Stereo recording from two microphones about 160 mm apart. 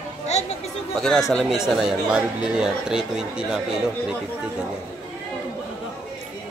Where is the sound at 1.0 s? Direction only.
5° left (ahead or behind).